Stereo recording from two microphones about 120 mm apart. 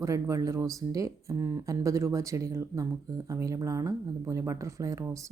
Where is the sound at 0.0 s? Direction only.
30° right (ahead or behind).